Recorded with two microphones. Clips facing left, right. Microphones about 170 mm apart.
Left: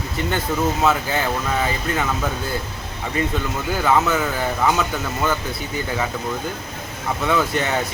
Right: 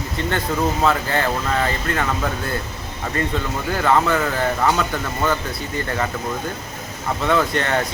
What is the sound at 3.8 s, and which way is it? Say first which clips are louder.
Speech: right 1 dB; 5° left (ahead or behind).